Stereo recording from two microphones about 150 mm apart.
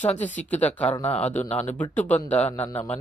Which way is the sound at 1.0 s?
45° left (ahead or behind).